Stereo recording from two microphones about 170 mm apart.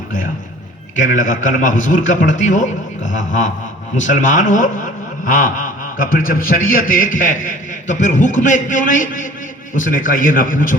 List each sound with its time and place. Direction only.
0.9 s speech: 50° left (ahead or behind)